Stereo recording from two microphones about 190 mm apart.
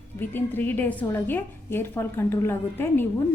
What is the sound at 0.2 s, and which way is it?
A woman's voice, 10° left (ahead or behind).